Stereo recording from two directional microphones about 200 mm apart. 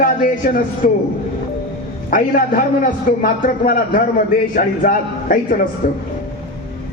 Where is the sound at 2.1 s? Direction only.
45° left (ahead or behind).